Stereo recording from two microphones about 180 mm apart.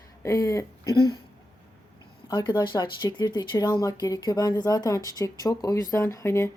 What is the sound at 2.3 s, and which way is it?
Speech, 25° left (ahead or behind).